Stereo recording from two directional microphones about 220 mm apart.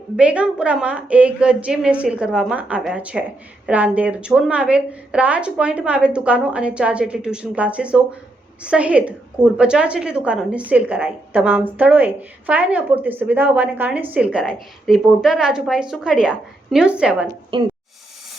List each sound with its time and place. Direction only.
0.2 s a woman's voice: 5° right (ahead or behind)
17.5 s speech: 25° right (ahead or behind)